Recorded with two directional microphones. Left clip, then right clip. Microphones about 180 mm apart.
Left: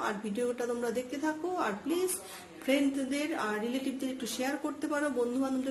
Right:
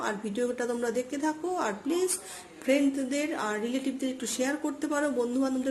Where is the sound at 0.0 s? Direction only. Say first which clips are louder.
Right 2 dB; 20° right (ahead or behind).